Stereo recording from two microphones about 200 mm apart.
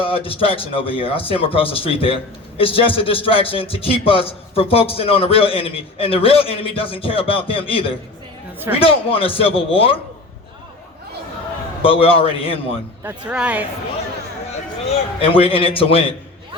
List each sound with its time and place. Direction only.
0.0 s a man's voice: 25° left (ahead or behind)
11.8 s a man's voice: 30° left (ahead or behind)
13.0 s speech: 10° right (ahead or behind)
15.2 s a man's voice: 25° left (ahead or behind)